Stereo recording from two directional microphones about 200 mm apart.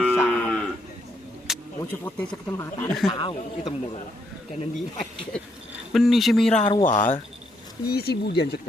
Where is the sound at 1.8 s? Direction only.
15° left (ahead or behind).